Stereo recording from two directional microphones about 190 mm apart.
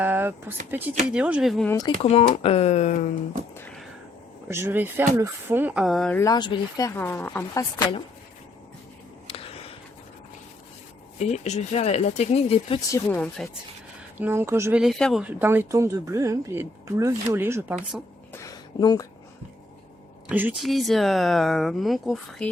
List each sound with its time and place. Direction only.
0.0 s speech: 10° right (ahead or behind)
2.0 s speech: 30° left (ahead or behind)
3.5 s a sound: 10° left (ahead or behind)
4.4 s speech: 15° right (ahead or behind); by 6.2 s 5° left (ahead or behind)
6.2 s speech: 20° left (ahead or behind)
9.2 s a sound: 30° left (ahead or behind)
11.2 s speech: 35° left (ahead or behind)
12.9 s speech: 5° left (ahead or behind)
14.2 s speech: 10° right (ahead or behind)
14.8 s speech: centre (ahead or behind)
18.3 s a sound: 20° left (ahead or behind)
20.2 s speech: 10° right (ahead or behind)